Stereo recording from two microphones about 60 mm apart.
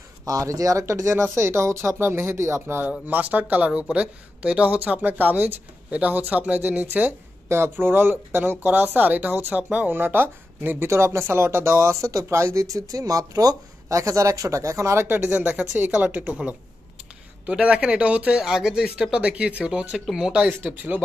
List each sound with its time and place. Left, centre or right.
0.2 s speech: right
3.1 s speech: right
7.4 s speech: right
9.9 s speech: right
10.9 s speech: right
12.9 s speech: right
15.0 s speech: right
17.5 s speech: centre
18.4 s speech: centre
19.9 s speech: centre
20.6 s speech: right